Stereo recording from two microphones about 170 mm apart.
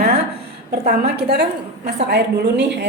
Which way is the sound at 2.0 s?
85° right.